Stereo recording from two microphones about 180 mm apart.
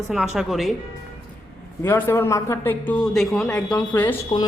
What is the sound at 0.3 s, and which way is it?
Speech, centre (ahead or behind).